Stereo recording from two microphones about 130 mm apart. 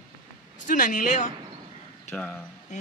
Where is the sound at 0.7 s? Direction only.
85° left.